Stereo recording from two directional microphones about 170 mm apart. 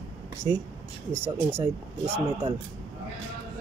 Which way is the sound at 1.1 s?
15° right (ahead or behind).